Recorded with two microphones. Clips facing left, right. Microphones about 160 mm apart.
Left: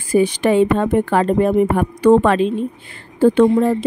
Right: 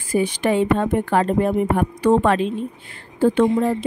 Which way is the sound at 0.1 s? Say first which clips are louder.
Left 5 dB; 80° left.